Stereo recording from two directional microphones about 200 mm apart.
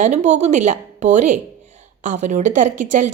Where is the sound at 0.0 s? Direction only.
35° right (ahead or behind).